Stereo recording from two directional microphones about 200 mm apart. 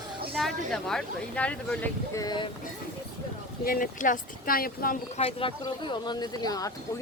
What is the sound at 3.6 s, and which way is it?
Speech, 45° left (ahead or behind).